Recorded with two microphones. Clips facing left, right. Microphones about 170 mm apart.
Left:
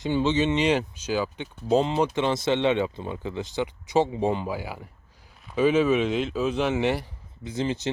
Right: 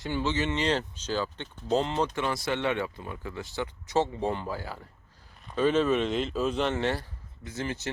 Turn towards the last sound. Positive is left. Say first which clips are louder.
# left 6 dB
turn(degrees=20)  # may be behind; listen again after turning